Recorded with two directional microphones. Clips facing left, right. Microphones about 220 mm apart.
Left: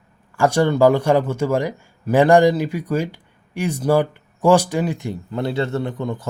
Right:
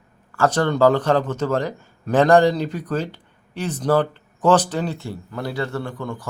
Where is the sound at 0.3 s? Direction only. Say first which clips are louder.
Left 2 dB; 10° left (ahead or behind).